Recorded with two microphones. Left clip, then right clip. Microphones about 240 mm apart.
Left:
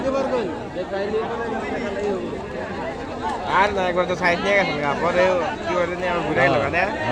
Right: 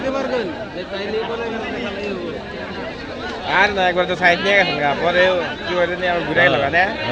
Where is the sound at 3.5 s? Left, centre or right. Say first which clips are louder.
Right 4 dB; right.